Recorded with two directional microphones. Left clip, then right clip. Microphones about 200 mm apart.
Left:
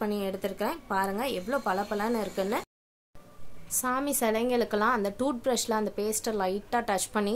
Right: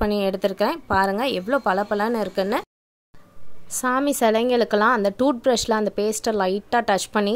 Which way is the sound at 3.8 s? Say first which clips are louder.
Right 8 dB; 40° right (ahead or behind).